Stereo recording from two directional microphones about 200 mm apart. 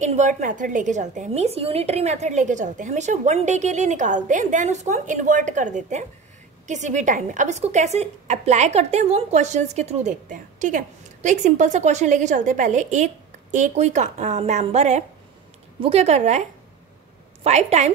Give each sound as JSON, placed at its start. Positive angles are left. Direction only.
{"t": 0.0, "sound": "a woman's voice", "side_deg": -35}